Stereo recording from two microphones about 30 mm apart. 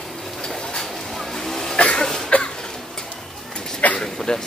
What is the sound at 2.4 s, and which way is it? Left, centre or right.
Cough, left.